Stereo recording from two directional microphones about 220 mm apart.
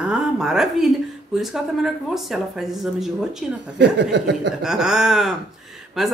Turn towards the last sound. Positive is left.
turn(degrees=0)  # may be behind; listen again after turning